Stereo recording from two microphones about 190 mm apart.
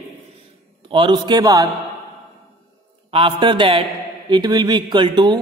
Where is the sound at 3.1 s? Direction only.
25° right (ahead or behind).